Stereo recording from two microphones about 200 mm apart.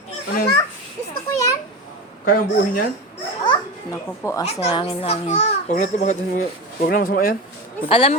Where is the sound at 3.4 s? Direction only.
15° left (ahead or behind).